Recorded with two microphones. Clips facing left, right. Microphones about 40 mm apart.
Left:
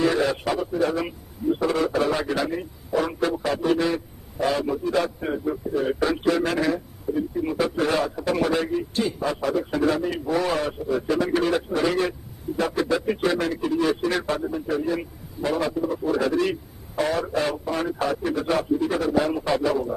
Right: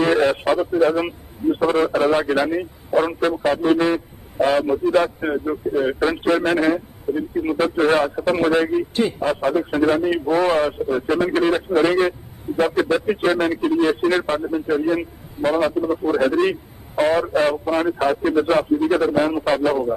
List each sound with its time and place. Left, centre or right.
0.0 s a man's voice: right